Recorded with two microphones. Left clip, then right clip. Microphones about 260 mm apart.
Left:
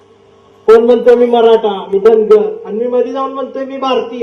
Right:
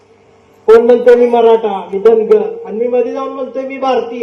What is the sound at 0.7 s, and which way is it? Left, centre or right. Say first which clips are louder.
Speech: even; left.